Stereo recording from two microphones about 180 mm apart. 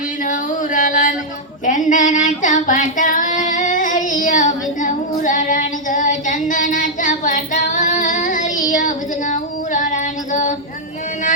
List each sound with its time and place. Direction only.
0.3 s female singing: 45° left (ahead or behind)
1.6 s child singing: 45° left (ahead or behind)
9.3 s female singing: 45° left (ahead or behind)